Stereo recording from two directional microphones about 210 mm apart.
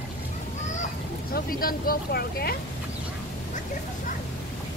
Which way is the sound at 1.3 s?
45° left (ahead or behind).